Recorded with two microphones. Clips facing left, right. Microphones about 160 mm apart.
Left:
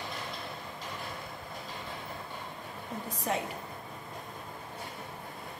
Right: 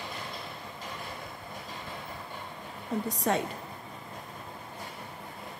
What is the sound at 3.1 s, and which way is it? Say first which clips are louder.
Speech: right 3 dB; 80° right.